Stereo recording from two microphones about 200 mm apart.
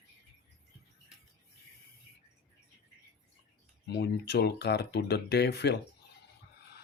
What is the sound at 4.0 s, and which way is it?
Speech, 55° left (ahead or behind).